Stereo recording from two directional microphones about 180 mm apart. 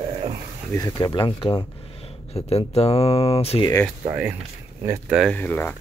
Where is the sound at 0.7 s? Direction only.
20° left (ahead or behind).